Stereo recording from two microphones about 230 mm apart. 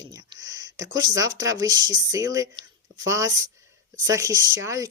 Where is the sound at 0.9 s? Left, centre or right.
Centre.